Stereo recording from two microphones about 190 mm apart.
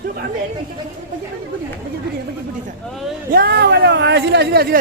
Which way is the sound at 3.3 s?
55° right (ahead or behind).